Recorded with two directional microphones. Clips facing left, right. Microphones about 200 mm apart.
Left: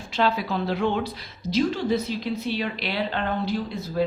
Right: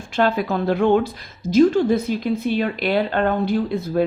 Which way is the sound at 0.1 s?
50° right (ahead or behind).